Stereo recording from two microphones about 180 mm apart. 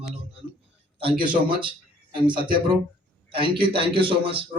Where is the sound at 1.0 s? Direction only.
25° right (ahead or behind).